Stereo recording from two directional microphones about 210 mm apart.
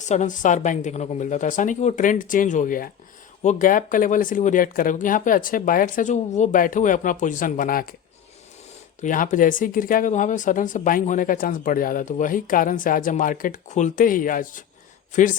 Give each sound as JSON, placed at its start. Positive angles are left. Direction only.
{"t": 0.0, "sound": "speech", "side_deg": 35}
{"t": 9.0, "sound": "speech", "side_deg": 40}